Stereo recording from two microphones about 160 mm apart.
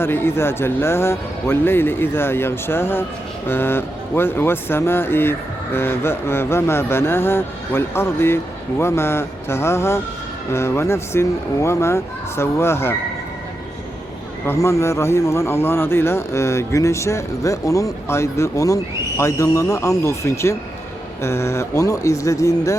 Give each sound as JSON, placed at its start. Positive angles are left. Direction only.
{"t": 0.0, "sound": "speech", "side_deg": 15}
{"t": 14.4, "sound": "speech", "side_deg": 20}